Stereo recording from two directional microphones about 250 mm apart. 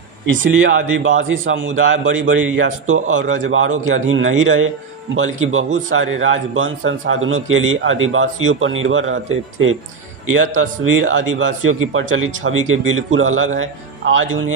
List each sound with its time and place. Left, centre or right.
0.3 s a man's voice: right